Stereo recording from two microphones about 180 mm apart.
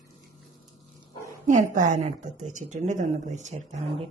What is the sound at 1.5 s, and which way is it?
A woman's voice, 45° right (ahead or behind).